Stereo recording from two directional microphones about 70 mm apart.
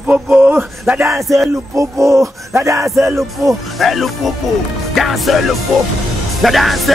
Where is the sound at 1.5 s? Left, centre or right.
Right.